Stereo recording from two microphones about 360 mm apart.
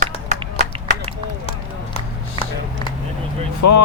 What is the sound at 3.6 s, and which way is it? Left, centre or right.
Speech, left.